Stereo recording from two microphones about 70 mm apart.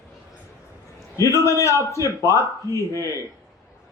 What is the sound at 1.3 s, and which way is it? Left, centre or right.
A man's voice, left.